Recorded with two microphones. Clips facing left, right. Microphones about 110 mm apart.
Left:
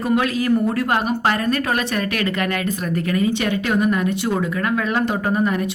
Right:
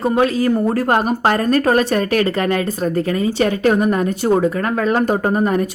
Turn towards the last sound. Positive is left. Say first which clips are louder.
# right 3 dB
turn(degrees=-40)  # may be behind; listen again after turning